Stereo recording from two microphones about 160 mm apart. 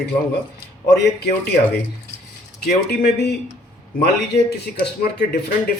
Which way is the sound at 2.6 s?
90° left.